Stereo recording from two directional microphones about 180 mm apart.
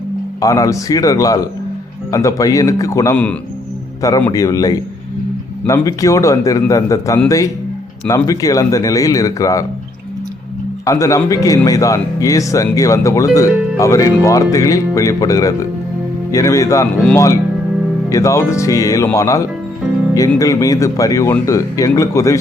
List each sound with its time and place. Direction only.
0.4 s speech: 20° left (ahead or behind)
4.3 s speech: 20° left (ahead or behind)
10.8 s speech: 20° left (ahead or behind)